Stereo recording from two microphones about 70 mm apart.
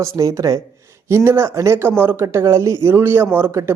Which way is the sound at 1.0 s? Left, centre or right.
Right.